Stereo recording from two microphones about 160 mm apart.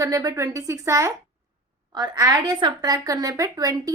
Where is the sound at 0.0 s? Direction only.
20° right (ahead or behind).